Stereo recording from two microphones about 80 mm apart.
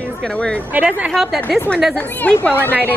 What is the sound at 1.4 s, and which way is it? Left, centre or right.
A woman's voice, centre.